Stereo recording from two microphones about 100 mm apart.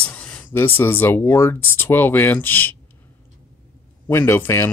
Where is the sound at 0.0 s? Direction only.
15° left (ahead or behind).